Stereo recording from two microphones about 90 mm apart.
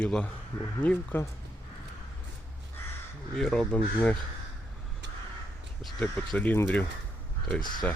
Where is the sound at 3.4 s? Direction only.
5° left (ahead or behind).